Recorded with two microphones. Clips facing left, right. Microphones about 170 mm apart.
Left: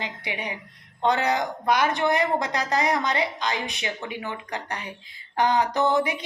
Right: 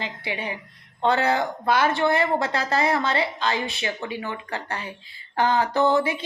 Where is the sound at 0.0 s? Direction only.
15° left (ahead or behind).